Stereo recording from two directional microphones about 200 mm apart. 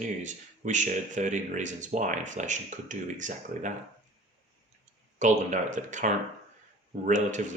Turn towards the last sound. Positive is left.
turn(degrees=-40)  # may be behind; listen again after turning